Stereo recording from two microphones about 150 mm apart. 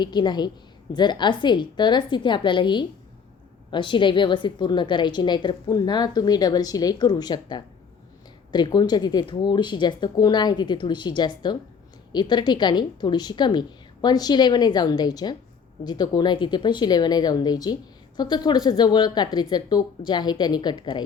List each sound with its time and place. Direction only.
0.0 s a woman's voice: 30° left (ahead or behind)